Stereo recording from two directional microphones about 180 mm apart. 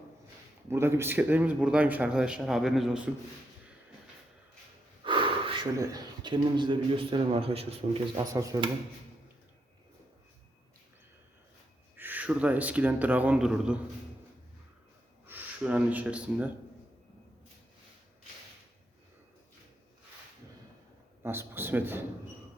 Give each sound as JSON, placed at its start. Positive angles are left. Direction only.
{"t": 0.7, "sound": "a man's voice", "side_deg": -15}
{"t": 5.0, "sound": "snort", "side_deg": -30}
{"t": 5.7, "sound": "speech", "side_deg": -20}
{"t": 8.1, "sound": "a man's voice", "side_deg": -15}
{"t": 11.9, "sound": "a man's voice", "side_deg": -10}
{"t": 15.3, "sound": "speech", "side_deg": -5}
{"t": 21.2, "sound": "a man's voice", "side_deg": -10}